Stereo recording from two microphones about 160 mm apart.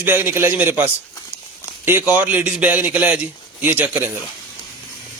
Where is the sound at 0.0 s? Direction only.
15° right (ahead or behind).